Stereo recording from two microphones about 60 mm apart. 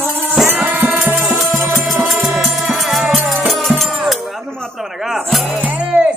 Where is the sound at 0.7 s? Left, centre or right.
Right.